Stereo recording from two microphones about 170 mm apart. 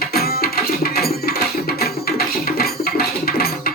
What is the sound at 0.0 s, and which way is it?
Music, 65° left (ahead or behind).